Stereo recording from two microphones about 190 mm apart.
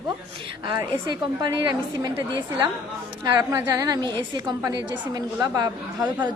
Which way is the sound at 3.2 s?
20° right (ahead or behind).